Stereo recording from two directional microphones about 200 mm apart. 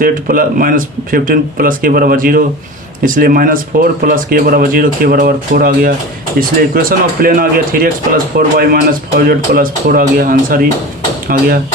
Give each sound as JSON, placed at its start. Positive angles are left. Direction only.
{"t": 0.0, "sound": "speech", "side_deg": -45}